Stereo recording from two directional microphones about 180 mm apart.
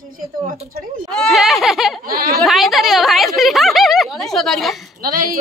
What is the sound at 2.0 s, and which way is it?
Speech, 55° right (ahead or behind).